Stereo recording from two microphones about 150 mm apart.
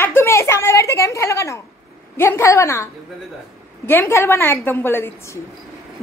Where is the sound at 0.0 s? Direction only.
15° left (ahead or behind).